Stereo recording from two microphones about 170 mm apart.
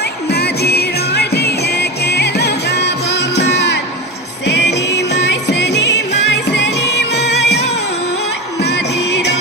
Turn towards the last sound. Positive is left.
turn(degrees=80)